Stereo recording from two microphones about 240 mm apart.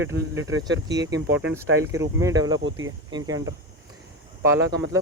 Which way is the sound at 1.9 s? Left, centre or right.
Centre.